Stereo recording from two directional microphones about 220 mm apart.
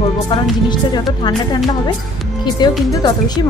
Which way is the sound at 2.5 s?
20° left (ahead or behind).